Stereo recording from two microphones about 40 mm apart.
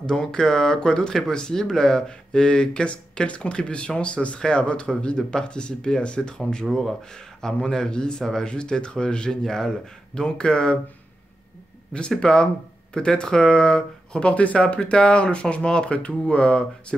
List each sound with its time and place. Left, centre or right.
0.0 s speech: centre
6.7 s speech: centre
12.2 s speech: left